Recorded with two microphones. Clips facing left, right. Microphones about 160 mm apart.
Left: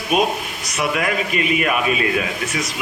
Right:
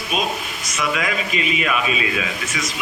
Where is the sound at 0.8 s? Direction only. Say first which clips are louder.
Left 2 dB; 55° left (ahead or behind).